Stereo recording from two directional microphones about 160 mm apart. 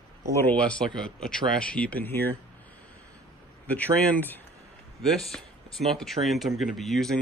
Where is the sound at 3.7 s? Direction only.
10° left (ahead or behind).